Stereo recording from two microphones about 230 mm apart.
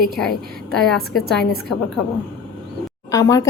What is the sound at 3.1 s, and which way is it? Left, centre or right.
Speech, centre.